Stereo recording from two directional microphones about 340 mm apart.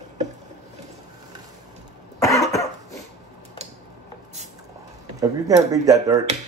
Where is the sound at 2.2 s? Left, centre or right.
Centre.